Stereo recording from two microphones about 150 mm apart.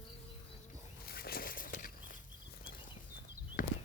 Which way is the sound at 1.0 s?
90° left.